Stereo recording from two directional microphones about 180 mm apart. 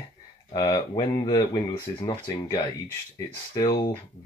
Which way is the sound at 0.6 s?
20° left (ahead or behind).